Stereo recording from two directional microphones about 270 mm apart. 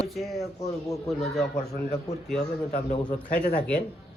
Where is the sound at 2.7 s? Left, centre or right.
Left.